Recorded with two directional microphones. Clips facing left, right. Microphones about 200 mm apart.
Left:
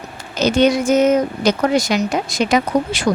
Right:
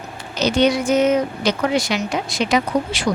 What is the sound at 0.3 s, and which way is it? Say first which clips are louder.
A woman's voice: left 3 dB; 50° left (ahead or behind).